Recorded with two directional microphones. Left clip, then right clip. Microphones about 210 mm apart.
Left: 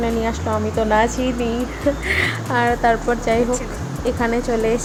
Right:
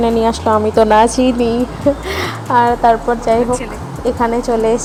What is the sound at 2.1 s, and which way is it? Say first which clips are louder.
A woman's voice: right 4 dB; 15° right (ahead or behind).